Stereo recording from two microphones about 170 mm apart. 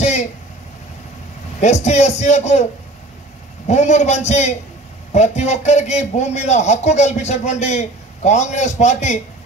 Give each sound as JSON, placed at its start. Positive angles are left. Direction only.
{"t": 0.0, "sound": "vehicle", "side_deg": 45}
{"t": 1.6, "sound": "a man's voice", "side_deg": 45}